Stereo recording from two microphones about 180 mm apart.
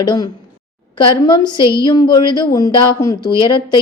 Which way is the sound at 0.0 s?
25° left (ahead or behind).